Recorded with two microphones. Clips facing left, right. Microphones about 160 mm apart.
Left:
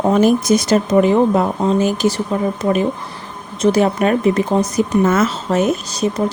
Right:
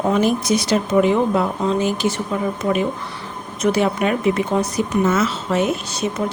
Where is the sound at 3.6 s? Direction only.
40° left (ahead or behind).